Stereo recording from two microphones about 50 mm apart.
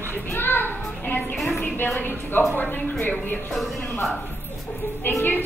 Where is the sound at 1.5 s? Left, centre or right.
Left.